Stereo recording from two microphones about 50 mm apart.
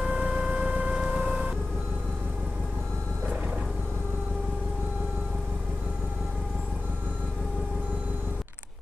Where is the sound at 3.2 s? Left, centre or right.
Centre.